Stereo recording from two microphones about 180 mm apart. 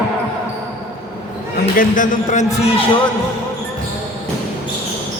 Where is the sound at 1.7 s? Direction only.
50° left (ahead or behind).